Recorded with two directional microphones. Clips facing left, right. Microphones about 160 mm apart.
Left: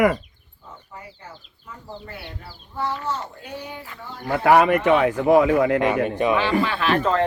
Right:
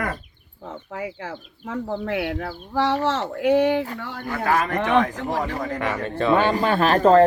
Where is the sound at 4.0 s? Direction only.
70° right (ahead or behind).